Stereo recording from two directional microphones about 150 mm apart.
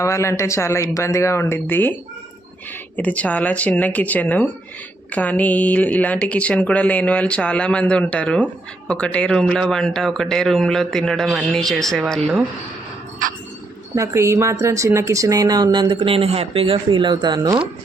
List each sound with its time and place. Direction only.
0.0 s a man's voice: 20° left (ahead or behind); by 12.4 s centre (ahead or behind)
13.9 s speech: 20° right (ahead or behind)